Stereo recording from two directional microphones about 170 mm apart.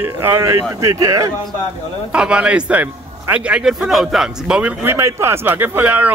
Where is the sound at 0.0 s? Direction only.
15° right (ahead or behind).